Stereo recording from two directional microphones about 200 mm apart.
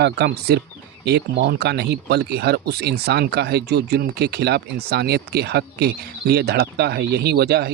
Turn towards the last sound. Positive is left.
turn(degrees=-55)  # may be behind; listen again after turning